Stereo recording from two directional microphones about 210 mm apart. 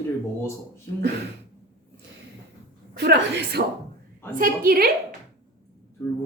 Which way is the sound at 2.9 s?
50° right (ahead or behind).